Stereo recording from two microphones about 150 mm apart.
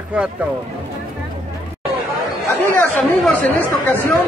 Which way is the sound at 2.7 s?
10° left (ahead or behind).